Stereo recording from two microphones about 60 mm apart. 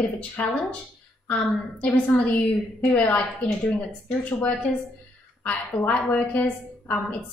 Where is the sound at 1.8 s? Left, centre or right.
Left.